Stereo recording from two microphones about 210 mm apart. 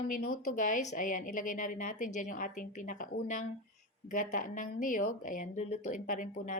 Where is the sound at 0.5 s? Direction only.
35° left (ahead or behind).